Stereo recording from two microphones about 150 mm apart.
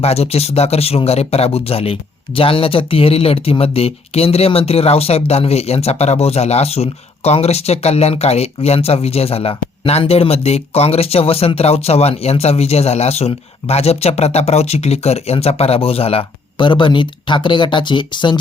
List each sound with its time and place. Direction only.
0.0 s speech: 45° left (ahead or behind)